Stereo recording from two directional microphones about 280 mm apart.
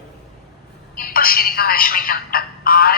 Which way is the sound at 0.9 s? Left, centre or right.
Left.